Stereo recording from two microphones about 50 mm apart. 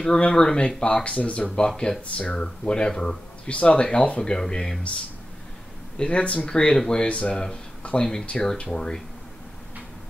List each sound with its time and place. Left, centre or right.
0.0 s speech: centre
5.9 s speech: left